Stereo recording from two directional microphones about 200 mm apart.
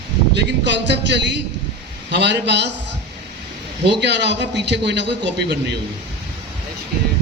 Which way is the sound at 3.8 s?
60° right (ahead or behind).